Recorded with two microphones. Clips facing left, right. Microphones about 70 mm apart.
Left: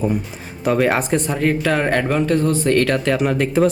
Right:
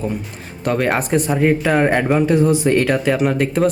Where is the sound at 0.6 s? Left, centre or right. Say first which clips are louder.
Left 1 dB; centre.